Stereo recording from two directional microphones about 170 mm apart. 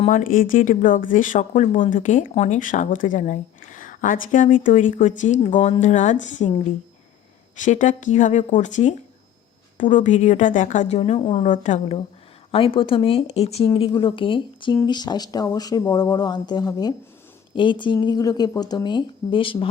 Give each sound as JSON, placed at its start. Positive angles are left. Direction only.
{"t": 0.1, "sound": "speech", "side_deg": 50}
{"t": 7.6, "sound": "speech", "side_deg": 45}
{"t": 11.4, "sound": "a woman's voice", "side_deg": 45}